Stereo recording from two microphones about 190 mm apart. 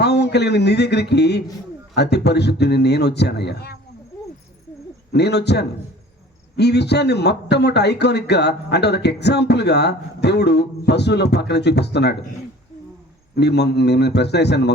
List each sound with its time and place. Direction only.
0.0 s speech: 60° left (ahead or behind)
5.1 s speech: 60° left (ahead or behind)
13.3 s speech: 60° left (ahead or behind)